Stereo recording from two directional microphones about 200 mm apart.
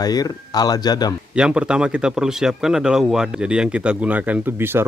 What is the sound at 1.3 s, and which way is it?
Speech, 5° right (ahead or behind).